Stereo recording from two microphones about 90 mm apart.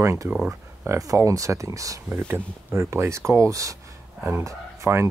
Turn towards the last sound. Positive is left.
turn(degrees=-35)  # may be behind; listen again after turning